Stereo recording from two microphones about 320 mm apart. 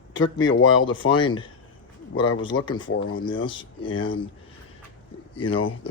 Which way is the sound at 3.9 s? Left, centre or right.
Left.